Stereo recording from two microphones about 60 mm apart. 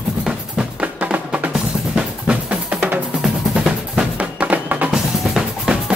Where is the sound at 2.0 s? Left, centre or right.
Centre.